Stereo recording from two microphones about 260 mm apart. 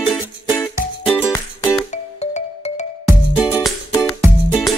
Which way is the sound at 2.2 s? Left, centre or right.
Left.